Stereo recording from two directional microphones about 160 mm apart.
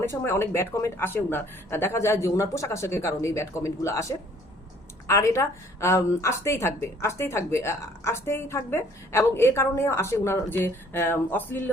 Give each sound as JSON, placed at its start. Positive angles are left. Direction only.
{"t": 0.0, "sound": "speech", "side_deg": 15}